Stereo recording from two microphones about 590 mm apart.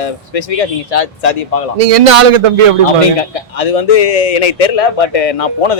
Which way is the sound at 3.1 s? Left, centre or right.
Left.